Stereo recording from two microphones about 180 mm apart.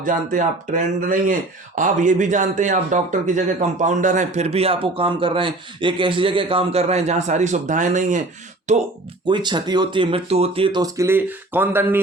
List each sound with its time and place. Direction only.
0.0 s speech: 45° right (ahead or behind)
9.2 s speech: 25° right (ahead or behind)